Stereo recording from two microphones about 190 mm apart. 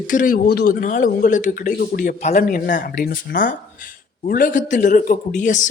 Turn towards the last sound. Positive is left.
turn(degrees=40)  # may be behind; listen again after turning